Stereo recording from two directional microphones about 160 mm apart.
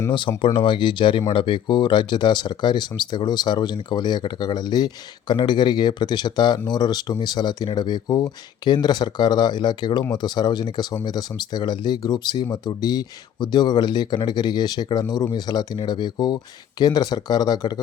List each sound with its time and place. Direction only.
0.1 s speech: 30° left (ahead or behind)